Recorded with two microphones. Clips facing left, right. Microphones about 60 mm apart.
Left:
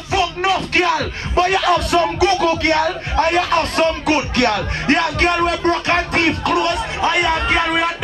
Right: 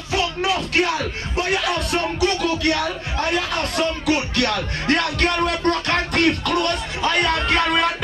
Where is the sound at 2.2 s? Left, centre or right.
Left.